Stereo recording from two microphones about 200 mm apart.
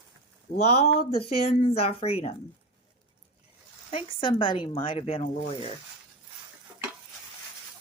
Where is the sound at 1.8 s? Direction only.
30° left (ahead or behind).